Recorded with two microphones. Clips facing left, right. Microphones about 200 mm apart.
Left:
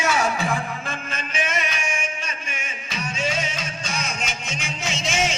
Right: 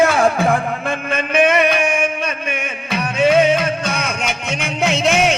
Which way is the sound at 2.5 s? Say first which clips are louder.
Right 10 dB; 60° right (ahead or behind).